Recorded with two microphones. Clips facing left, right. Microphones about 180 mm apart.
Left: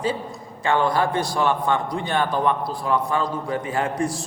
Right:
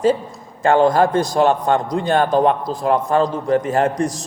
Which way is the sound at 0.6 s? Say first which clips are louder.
Right 7 dB; 45° right (ahead or behind).